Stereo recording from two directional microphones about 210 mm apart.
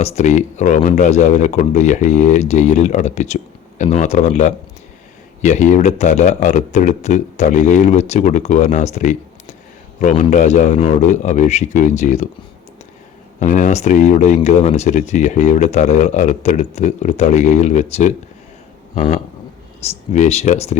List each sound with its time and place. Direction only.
0.0 s speech: 35° left (ahead or behind)
13.4 s speech: 35° left (ahead or behind)